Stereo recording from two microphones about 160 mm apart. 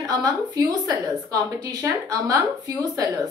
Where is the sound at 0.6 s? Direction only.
20° right (ahead or behind).